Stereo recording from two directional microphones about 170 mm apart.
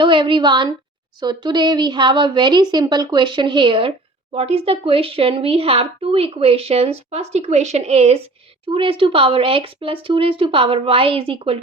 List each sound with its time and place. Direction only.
0.0 s a woman's voice: 30° right (ahead or behind)